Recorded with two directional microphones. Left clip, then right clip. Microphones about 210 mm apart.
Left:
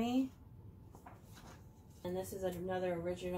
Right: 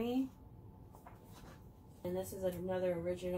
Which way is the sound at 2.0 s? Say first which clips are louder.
Right 1 dB; 20° left (ahead or behind).